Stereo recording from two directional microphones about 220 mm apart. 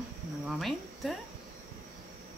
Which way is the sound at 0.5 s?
Centre (ahead or behind).